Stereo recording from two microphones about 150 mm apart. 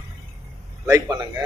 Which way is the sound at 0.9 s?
25° right (ahead or behind).